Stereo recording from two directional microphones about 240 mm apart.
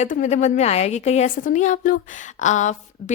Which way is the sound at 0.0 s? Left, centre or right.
Left.